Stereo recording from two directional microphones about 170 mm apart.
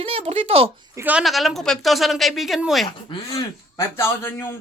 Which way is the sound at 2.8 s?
25° left (ahead or behind).